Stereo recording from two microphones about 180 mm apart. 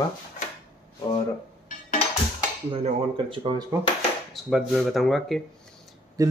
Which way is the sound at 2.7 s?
30° right (ahead or behind).